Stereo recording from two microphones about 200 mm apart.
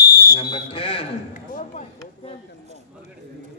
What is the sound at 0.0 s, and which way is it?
Fire alarm, 50° left (ahead or behind).